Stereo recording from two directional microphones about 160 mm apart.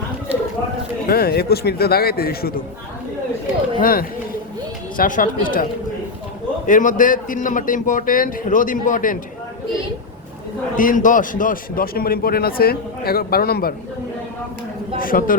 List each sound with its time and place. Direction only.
1.0 s speech: 70° left (ahead or behind)
3.8 s a man's voice: 65° left (ahead or behind)
6.7 s a man's voice: 55° left (ahead or behind)
10.8 s speech: 55° left (ahead or behind); by 13.7 s 70° left (ahead or behind)
14.9 s a man's voice: 60° left (ahead or behind)